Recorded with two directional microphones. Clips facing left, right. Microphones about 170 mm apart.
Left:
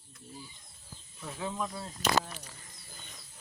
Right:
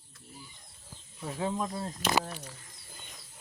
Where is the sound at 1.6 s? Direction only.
35° right (ahead or behind).